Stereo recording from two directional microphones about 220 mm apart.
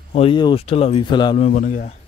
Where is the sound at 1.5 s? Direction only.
35° left (ahead or behind).